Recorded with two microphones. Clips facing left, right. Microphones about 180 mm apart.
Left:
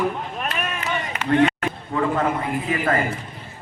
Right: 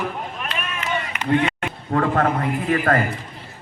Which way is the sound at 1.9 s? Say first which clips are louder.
Right 3 dB; 55° right (ahead or behind).